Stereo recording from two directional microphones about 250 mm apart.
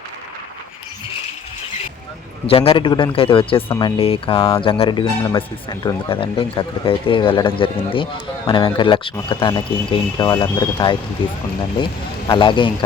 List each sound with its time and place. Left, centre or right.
2.5 s speech: left
12.3 s speech: centre